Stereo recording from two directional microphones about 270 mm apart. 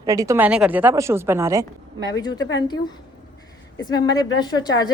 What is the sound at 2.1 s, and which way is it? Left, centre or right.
Speech, centre.